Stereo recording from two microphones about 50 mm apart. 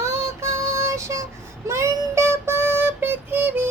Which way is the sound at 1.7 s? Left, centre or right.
Right.